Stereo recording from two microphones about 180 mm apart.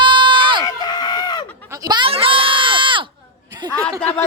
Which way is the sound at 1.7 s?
20° right (ahead or behind).